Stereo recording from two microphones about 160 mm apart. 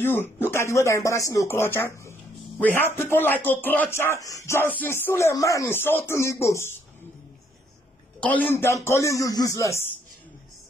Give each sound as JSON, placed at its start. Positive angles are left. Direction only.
{"t": 0.0, "sound": "speech", "side_deg": 15}
{"t": 8.2, "sound": "speech", "side_deg": 10}